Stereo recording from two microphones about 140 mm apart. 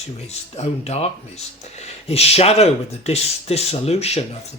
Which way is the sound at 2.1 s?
45° left (ahead or behind).